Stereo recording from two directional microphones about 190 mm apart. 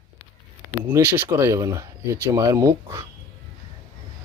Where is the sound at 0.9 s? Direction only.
10° right (ahead or behind).